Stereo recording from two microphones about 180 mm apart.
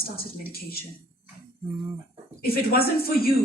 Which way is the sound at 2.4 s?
55° left (ahead or behind).